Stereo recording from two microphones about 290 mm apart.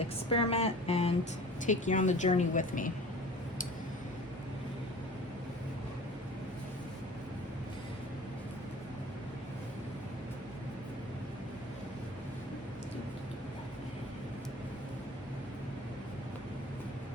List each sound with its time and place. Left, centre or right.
0.0 s a woman's voice: centre